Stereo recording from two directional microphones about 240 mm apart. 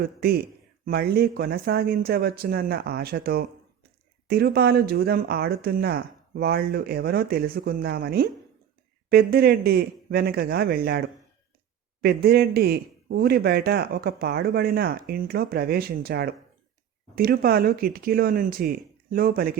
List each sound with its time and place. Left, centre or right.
0.0 s a man's voice: right